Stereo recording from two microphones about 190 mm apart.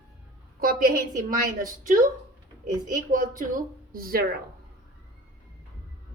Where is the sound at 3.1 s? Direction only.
45° right (ahead or behind).